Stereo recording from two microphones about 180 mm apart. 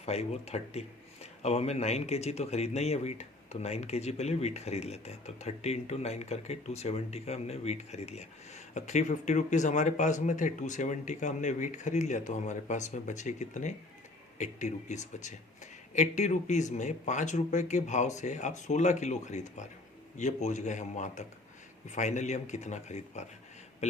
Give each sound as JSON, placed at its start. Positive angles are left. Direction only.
{"t": 0.0, "sound": "speech", "side_deg": 35}